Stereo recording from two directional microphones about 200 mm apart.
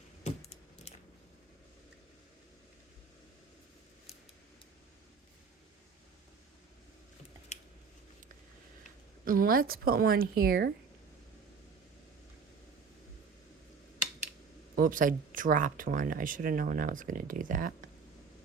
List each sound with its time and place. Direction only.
0.9 s biting: 30° left (ahead or behind)
9.2 s speech: 45° right (ahead or behind)
14.8 s speech: 45° right (ahead or behind)